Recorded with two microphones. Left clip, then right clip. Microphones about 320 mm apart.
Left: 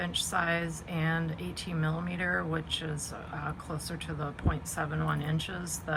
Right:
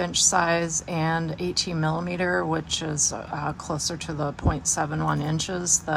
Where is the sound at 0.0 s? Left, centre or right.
Centre.